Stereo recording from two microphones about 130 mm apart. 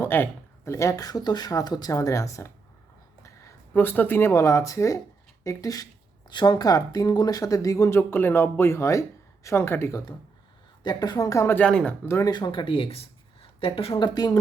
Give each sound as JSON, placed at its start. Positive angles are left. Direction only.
{"t": 0.0, "sound": "speech", "side_deg": 15}
{"t": 3.8, "sound": "speech", "side_deg": 15}
{"t": 10.8, "sound": "speech", "side_deg": 30}
{"t": 11.6, "sound": "speech", "side_deg": 10}
{"t": 12.0, "sound": "speech", "side_deg": 20}
{"t": 12.3, "sound": "speech", "side_deg": 35}